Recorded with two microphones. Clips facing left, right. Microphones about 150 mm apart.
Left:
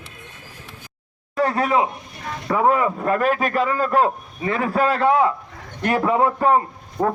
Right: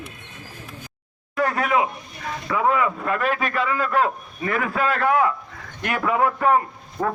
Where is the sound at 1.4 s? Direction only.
30° left (ahead or behind).